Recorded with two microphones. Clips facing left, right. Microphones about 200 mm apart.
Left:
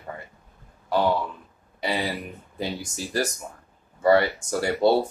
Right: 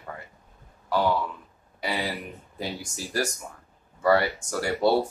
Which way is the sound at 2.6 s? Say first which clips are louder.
Left 3 dB; 25° left (ahead or behind).